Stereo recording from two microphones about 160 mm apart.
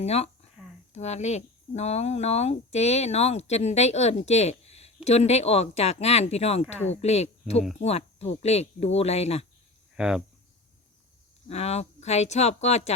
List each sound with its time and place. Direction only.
0.0 s speech: 40° left (ahead or behind)
0.6 s a sound: 5° right (ahead or behind)
0.9 s speech: 45° left (ahead or behind)
9.9 s speech: 5° right (ahead or behind)
11.4 s speech: 40° left (ahead or behind)